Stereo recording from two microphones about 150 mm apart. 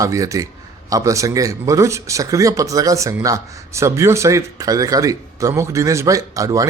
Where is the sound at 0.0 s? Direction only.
20° right (ahead or behind).